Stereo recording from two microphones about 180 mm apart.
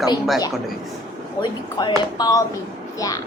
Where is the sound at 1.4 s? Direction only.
25° left (ahead or behind).